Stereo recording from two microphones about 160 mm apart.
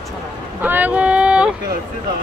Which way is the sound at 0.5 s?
10° right (ahead or behind).